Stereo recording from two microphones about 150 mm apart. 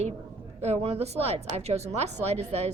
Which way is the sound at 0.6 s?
45° right (ahead or behind).